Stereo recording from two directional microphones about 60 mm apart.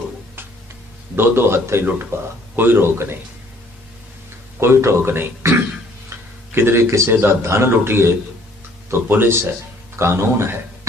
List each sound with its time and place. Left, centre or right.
1.1 s a man's voice: right
1.8 s a man's voice: right
4.6 s speech: right
6.1 s tick-tock: right
6.5 s a man's voice: right